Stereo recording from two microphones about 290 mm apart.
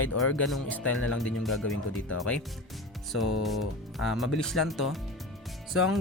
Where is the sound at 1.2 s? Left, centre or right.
Centre.